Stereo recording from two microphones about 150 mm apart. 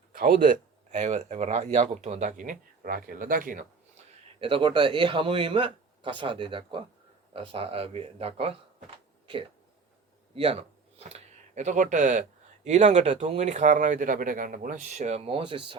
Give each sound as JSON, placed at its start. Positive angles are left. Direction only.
{"t": 0.1, "sound": "speech", "side_deg": -65}
{"t": 4.4, "sound": "speech", "side_deg": -35}